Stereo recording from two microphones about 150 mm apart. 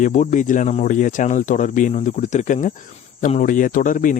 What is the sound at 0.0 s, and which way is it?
Speech, 55° left (ahead or behind).